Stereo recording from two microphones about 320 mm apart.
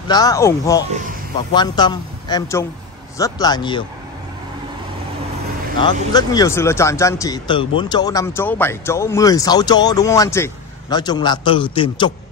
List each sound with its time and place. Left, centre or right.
0.1 s speech: centre
5.8 s speech: centre